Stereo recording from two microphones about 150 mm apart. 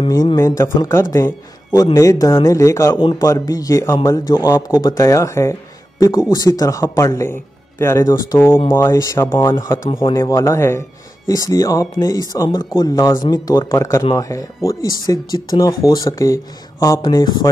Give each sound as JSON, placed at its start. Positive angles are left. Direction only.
{"t": 0.1, "sound": "speech", "side_deg": 25}
{"t": 3.0, "sound": "speech", "side_deg": 35}
{"t": 3.3, "sound": "a man's voice", "side_deg": 25}